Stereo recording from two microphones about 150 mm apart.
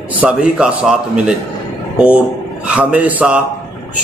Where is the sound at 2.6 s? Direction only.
10° right (ahead or behind).